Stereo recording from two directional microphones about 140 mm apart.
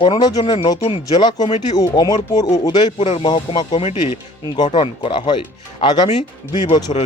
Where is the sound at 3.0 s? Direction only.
40° left (ahead or behind).